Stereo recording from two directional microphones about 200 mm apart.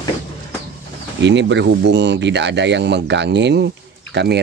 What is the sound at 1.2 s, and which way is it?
Speech, 60° right (ahead or behind).